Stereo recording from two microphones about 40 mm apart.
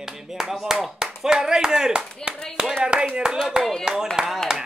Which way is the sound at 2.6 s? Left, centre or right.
Centre.